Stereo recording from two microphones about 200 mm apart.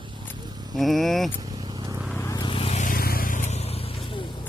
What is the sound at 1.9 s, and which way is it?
Vehicle, centre (ahead or behind).